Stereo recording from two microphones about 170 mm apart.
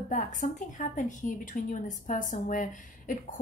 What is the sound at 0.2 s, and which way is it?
A woman's voice, 50° left (ahead or behind).